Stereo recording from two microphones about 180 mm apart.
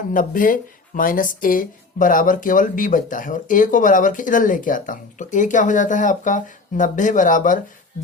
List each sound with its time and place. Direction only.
0.1 s speech: 50° left (ahead or behind)